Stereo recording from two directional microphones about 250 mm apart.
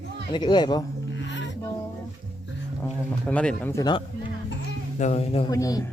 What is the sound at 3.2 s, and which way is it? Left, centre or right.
Speech, centre.